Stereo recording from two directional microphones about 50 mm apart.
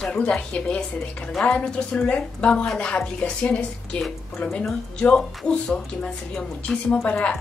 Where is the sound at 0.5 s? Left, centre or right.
Left.